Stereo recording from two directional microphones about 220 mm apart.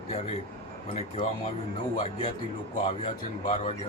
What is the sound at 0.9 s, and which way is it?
Speech, 30° left (ahead or behind).